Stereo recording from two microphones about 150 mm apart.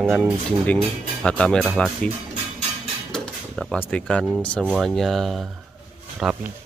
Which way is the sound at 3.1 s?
5° left (ahead or behind).